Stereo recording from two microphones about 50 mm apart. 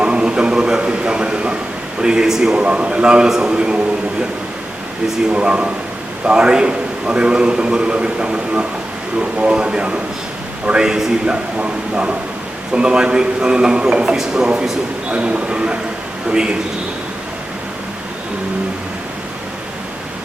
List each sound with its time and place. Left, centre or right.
0.0 s a sound: centre
2.0 s speech: centre
2.6 s a man's voice: right
5.3 s a man's voice: right
11.6 s a man's voice: right